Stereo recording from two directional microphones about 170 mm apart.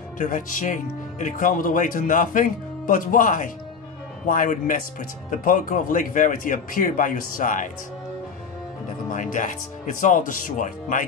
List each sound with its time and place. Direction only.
0.2 s speech: 50° left (ahead or behind)
9.1 s speech: 50° left (ahead or behind)